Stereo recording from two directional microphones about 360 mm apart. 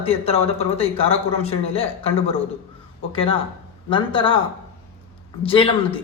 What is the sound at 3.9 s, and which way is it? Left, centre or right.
Speech, centre.